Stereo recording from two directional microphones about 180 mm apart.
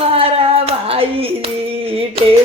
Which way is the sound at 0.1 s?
35° right (ahead or behind).